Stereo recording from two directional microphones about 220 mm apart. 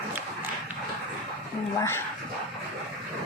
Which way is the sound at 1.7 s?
10° left (ahead or behind).